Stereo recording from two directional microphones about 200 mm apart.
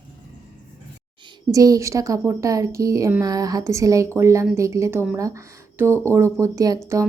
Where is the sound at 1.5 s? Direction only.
15° right (ahead or behind).